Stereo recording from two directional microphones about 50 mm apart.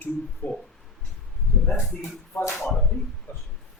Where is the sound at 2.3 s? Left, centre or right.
Left.